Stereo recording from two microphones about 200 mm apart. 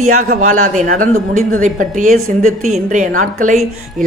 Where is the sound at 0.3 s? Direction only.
40° right (ahead or behind).